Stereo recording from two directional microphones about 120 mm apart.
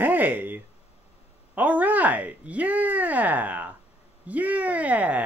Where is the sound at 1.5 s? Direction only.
15° right (ahead or behind).